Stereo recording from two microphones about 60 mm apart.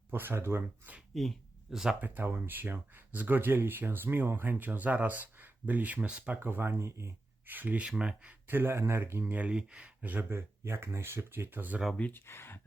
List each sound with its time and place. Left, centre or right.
0.1 s speech: right
1.7 s speech: centre
2.0 s speech: right
7.4 s speech: right
7.9 s speech: centre
8.4 s speech: right
9.3 s speech: centre
10.1 s speech: right
12.1 s speech: left